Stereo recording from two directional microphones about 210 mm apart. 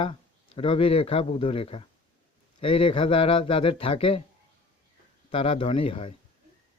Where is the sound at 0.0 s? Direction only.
25° left (ahead or behind).